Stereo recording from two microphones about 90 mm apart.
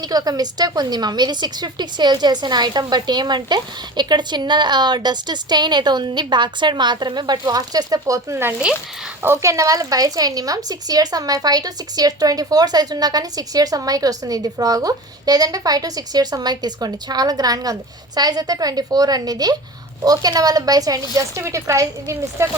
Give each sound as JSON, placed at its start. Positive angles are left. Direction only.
{"t": 0.0, "sound": "a woman's voice", "side_deg": -45}